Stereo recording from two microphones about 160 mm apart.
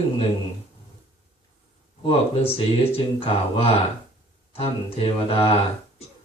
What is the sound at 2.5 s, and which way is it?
Speech, 35° left (ahead or behind).